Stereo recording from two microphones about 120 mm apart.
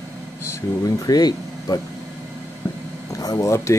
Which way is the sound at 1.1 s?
35° left (ahead or behind).